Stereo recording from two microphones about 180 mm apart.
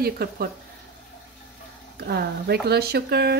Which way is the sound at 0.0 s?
60° right (ahead or behind).